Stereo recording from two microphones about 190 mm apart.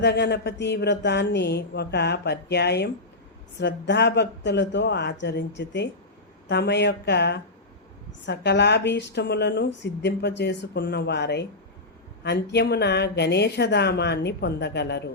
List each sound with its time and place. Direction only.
0.0 s speech: 60° left (ahead or behind)